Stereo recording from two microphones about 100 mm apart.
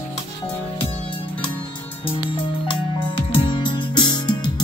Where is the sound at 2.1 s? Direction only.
60° left (ahead or behind).